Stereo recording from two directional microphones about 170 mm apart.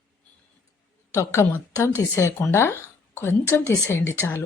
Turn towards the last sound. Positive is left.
turn(degrees=15)  # may be behind; listen again after turning